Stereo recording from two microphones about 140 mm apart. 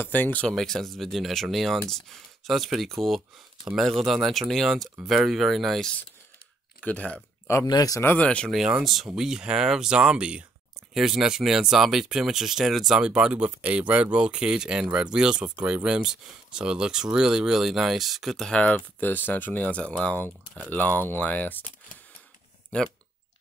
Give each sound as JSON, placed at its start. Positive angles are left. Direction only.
{"t": 0.0, "sound": "speech", "side_deg": 10}
{"t": 4.0, "sound": "speech", "side_deg": 0}
{"t": 7.6, "sound": "speech", "side_deg": 30}
{"t": 8.0, "sound": "speech", "side_deg": 10}
{"t": 8.5, "sound": "speech", "side_deg": -5}
{"t": 22.7, "sound": "speech", "side_deg": 10}